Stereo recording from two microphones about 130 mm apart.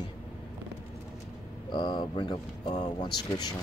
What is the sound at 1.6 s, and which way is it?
Speech, 35° left (ahead or behind).